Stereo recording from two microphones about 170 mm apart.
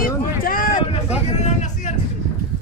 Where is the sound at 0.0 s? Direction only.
55° left (ahead or behind).